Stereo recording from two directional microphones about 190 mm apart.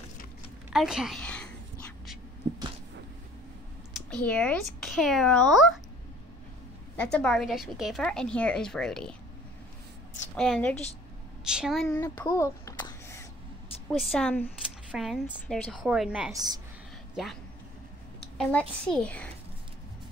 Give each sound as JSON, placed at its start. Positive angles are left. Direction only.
{"t": 0.7, "sound": "speech", "side_deg": 0}
{"t": 3.9, "sound": "speech", "side_deg": 5}
{"t": 7.0, "sound": "a woman's voice", "side_deg": 5}
{"t": 10.3, "sound": "a woman's voice", "side_deg": 5}
{"t": 11.9, "sound": "a sound", "side_deg": 15}
{"t": 13.9, "sound": "a woman's voice", "side_deg": 5}
{"t": 14.9, "sound": "a woman's voice", "side_deg": -5}
{"t": 16.3, "sound": "a woman's voice", "side_deg": -20}
{"t": 17.1, "sound": "speech", "side_deg": 0}
{"t": 18.4, "sound": "a woman's voice", "side_deg": 5}